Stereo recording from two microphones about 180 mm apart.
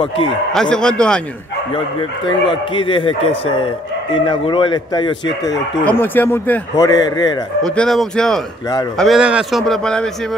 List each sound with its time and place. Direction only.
0.5 s speech: 5° left (ahead or behind)
2.5 s a man's voice: 30° left (ahead or behind)
5.2 s speech: 75° left (ahead or behind)
5.9 s a man's voice: 10° left (ahead or behind)
7.6 s speech: 5° left (ahead or behind)